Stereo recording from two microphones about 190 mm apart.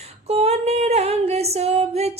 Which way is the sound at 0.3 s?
35° right (ahead or behind).